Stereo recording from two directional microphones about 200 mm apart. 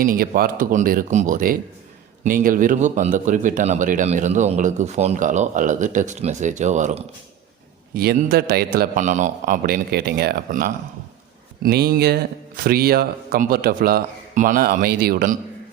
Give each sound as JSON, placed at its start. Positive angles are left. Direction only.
{"t": 0.0, "sound": "a man's voice", "side_deg": -45}
{"t": 7.9, "sound": "a man's voice", "side_deg": -50}